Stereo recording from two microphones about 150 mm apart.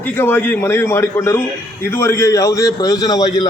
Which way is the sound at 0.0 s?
15° left (ahead or behind).